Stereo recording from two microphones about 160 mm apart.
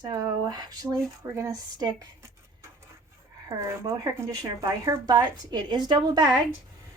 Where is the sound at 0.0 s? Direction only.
25° right (ahead or behind).